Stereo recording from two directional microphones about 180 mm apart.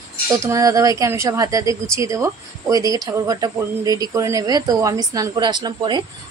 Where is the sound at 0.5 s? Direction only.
20° right (ahead or behind).